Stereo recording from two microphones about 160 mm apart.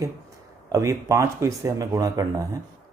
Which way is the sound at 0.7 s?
20° right (ahead or behind).